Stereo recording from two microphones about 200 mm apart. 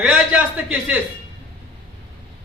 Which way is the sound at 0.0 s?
5° right (ahead or behind).